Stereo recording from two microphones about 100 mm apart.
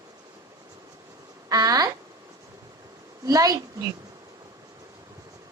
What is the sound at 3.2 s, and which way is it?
Speech, 35° right (ahead or behind).